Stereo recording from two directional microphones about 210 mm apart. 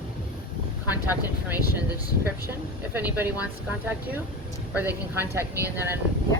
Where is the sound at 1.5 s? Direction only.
10° right (ahead or behind).